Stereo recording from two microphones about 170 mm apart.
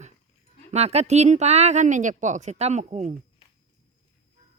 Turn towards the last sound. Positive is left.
turn(degrees=-40)  # may be behind; listen again after turning